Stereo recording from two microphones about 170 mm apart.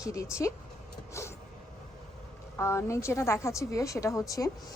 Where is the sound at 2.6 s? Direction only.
15° left (ahead or behind).